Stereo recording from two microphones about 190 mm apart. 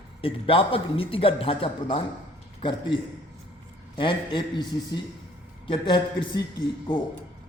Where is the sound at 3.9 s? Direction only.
25° left (ahead or behind).